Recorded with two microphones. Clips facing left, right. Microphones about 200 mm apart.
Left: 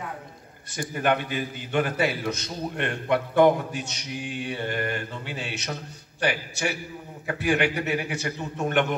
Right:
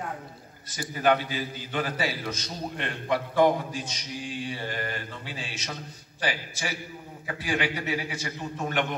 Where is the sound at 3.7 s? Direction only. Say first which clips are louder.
Left 2 dB; 65° left (ahead or behind).